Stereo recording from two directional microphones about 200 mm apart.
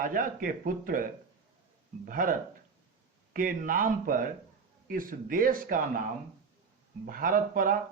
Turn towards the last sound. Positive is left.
turn(degrees=-45)  # may be behind; listen again after turning